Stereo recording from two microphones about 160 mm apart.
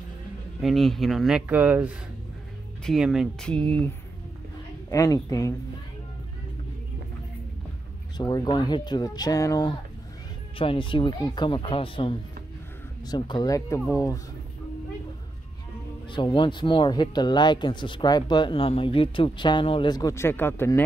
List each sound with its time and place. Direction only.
0.6 s speech: centre (ahead or behind)
4.9 s speech: 20° left (ahead or behind)
8.2 s speech: 25° left (ahead or behind)
16.3 s speech: 30° left (ahead or behind); by 20.8 s 15° left (ahead or behind)